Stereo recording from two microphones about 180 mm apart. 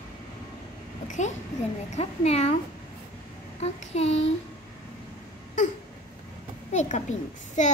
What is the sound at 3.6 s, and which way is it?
Speech, 35° left (ahead or behind).